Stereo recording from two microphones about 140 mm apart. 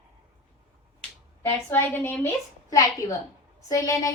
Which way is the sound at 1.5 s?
15° left (ahead or behind).